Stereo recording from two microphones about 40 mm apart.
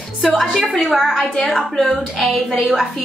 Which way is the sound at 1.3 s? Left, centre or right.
Centre.